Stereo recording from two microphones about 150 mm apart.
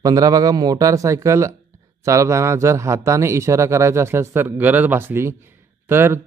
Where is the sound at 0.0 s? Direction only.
25° right (ahead or behind).